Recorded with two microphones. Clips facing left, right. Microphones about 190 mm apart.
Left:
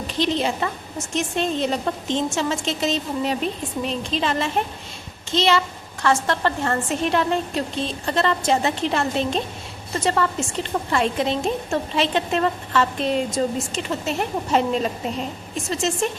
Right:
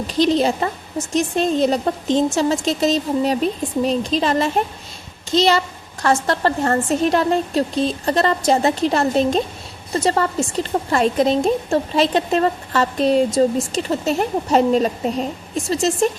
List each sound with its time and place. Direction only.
0.1 s a woman's voice: 40° right (ahead or behind)